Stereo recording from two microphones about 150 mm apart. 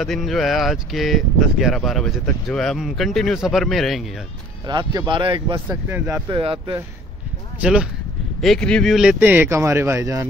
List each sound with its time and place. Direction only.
0.0 s speech: centre (ahead or behind)
4.6 s speech: 30° right (ahead or behind)
5.7 s speech: 15° right (ahead or behind)
6.2 s speech: 35° right (ahead or behind)
7.6 s speech: 5° right (ahead or behind)
8.4 s speech: 5° left (ahead or behind)
9.2 s speech: 15° right (ahead or behind)